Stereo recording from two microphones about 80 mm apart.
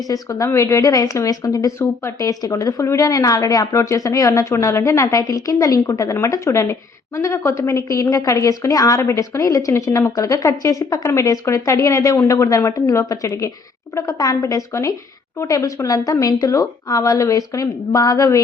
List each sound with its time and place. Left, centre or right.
0.1 s a woman's voice: left
1.8 s a woman's voice: left
2.4 s a woman's voice: left